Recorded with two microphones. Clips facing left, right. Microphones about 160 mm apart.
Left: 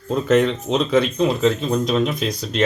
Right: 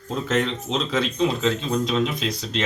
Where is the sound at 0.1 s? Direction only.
55° left (ahead or behind).